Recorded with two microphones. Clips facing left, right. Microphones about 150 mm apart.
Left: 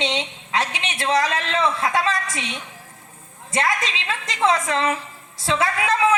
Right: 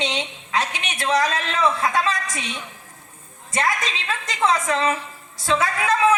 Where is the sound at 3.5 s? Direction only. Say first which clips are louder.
Left 1 dB; 25° left (ahead or behind).